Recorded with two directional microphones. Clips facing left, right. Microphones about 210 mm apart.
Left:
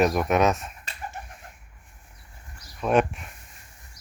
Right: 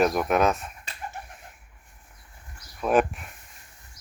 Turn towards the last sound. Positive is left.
turn(degrees=0)  # may be behind; listen again after turning